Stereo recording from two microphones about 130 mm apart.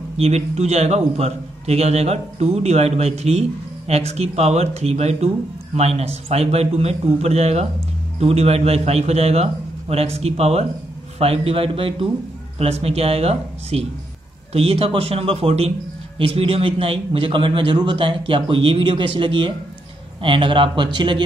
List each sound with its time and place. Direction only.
0.2 s a man's voice: 55° right (ahead or behind); by 21.2 s 35° right (ahead or behind)